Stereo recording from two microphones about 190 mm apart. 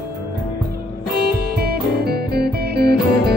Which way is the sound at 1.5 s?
55° right (ahead or behind).